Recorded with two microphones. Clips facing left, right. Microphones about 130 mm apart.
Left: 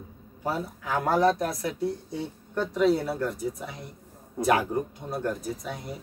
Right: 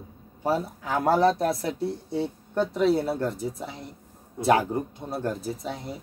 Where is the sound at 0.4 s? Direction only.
30° right (ahead or behind).